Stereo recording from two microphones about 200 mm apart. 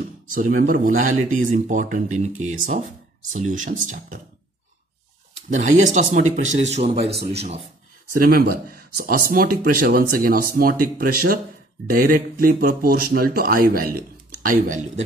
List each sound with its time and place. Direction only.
0.3 s speech: 45° right (ahead or behind)
5.5 s speech: 35° right (ahead or behind)
8.1 s speech: 45° right (ahead or behind)